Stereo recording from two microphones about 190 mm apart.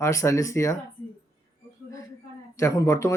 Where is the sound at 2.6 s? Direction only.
15° left (ahead or behind).